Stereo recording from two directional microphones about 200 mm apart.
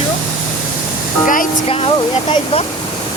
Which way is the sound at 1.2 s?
45° left (ahead or behind).